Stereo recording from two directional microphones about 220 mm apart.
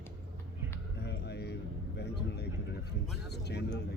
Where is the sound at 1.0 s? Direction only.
50° left (ahead or behind).